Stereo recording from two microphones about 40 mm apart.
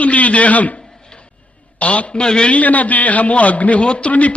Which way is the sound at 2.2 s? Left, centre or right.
Left.